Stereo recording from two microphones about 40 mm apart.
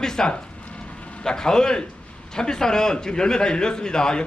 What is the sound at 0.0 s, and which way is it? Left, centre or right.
A man's voice, centre.